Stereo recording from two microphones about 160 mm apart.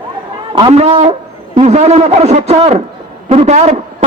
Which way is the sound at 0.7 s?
40° right (ahead or behind).